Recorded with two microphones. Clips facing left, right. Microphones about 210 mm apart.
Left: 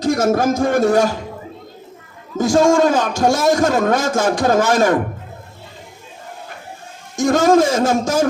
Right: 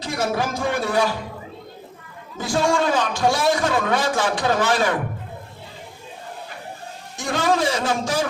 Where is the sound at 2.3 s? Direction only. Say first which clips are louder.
Left 8 dB; 45° left (ahead or behind).